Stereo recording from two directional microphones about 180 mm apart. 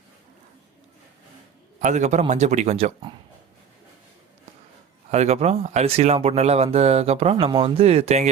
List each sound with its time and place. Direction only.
1.8 s speech: 40° right (ahead or behind)
5.1 s speech: 35° right (ahead or behind)